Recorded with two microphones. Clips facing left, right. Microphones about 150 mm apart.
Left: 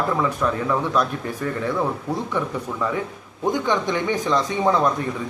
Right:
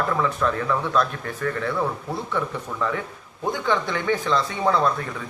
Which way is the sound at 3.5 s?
15° left (ahead or behind).